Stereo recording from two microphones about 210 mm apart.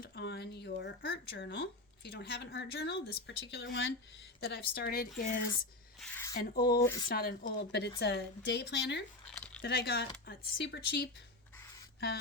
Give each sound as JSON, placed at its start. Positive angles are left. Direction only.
{"t": 0.0, "sound": "a woman's voice", "side_deg": 50}
{"t": 4.4, "sound": "a woman's voice", "side_deg": 50}
{"t": 6.0, "sound": "a sound", "side_deg": 10}
{"t": 6.3, "sound": "a woman's voice", "side_deg": 45}
{"t": 6.8, "sound": "speech", "side_deg": 15}
{"t": 7.1, "sound": "a woman's voice", "side_deg": 45}
{"t": 9.2, "sound": "a sound", "side_deg": 5}
{"t": 9.6, "sound": "a woman's voice", "side_deg": 50}